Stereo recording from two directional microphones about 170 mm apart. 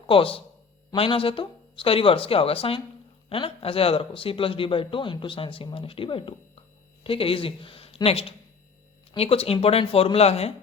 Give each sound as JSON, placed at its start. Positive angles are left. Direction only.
{"t": 0.1, "sound": "a man's voice", "side_deg": 30}